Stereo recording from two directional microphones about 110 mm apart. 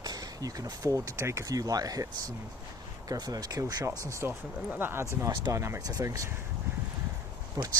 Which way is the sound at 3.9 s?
25° right (ahead or behind).